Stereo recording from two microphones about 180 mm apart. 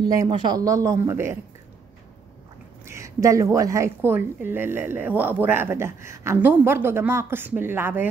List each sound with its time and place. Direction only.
0.0 s a woman's voice: 20° right (ahead or behind)
2.8 s a woman's voice: 15° right (ahead or behind)